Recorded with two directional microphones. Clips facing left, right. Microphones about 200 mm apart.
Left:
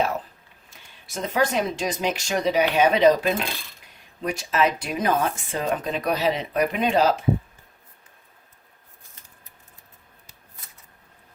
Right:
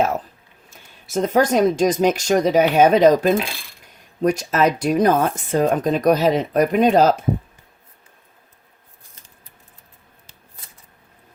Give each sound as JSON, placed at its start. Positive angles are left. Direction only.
{"t": 0.7, "sound": "speech", "side_deg": -45}